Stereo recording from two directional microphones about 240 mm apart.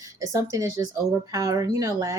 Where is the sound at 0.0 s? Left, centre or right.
Centre.